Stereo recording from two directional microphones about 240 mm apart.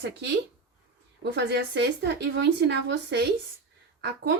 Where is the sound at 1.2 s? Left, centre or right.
Right.